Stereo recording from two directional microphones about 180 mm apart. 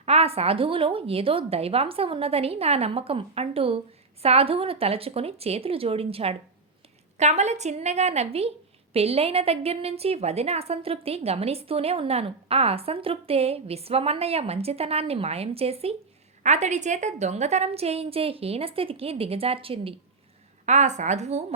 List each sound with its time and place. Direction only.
0.0 s a woman's voice: 35° right (ahead or behind)